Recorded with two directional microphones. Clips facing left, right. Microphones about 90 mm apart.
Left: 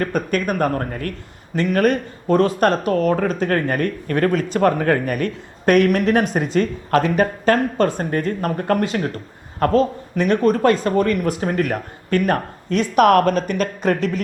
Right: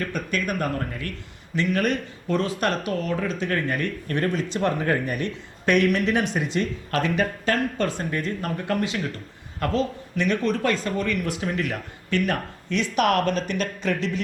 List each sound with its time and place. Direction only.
0.0 s speech: 45° left (ahead or behind)